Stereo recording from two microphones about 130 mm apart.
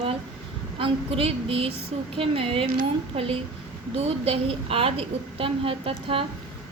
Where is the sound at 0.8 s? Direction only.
45° right (ahead or behind).